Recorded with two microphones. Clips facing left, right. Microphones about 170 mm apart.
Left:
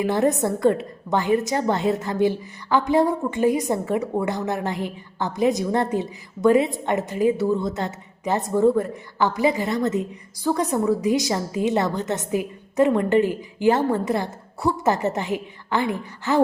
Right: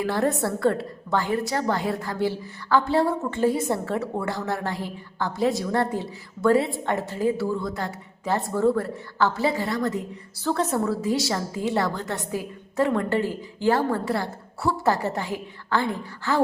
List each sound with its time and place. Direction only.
0.0 s a woman's voice: 20° left (ahead or behind)